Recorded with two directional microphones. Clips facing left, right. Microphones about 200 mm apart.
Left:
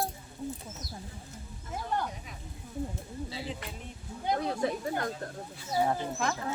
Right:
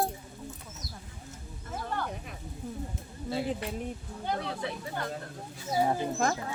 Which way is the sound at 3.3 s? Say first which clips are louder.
Right 11 dB; 55° right (ahead or behind).